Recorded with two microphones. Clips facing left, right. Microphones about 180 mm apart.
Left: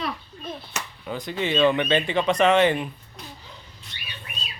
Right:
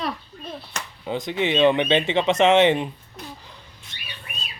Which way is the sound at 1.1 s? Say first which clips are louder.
Right 3 dB; 20° right (ahead or behind).